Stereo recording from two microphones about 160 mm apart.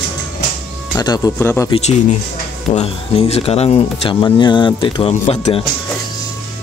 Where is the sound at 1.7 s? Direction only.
45° left (ahead or behind).